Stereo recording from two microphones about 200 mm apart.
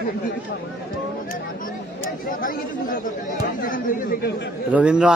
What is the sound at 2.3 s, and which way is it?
Speech, 45° left (ahead or behind).